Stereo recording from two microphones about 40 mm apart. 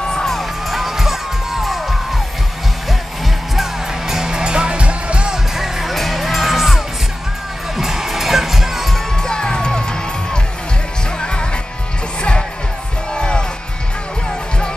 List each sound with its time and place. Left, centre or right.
0.0 s music: centre
0.3 s crowd: centre
4.1 s music: centre
5.3 s music: centre
8.9 s music: centre